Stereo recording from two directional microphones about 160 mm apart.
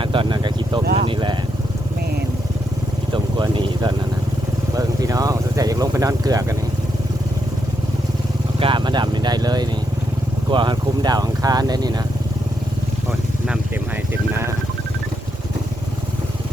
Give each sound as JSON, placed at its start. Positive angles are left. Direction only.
{"t": 0.0, "sound": "vehicle", "side_deg": -30}
{"t": 3.1, "sound": "vehicle", "side_deg": -30}
{"t": 8.5, "sound": "speech", "side_deg": -30}
{"t": 14.1, "sound": "speech", "side_deg": -15}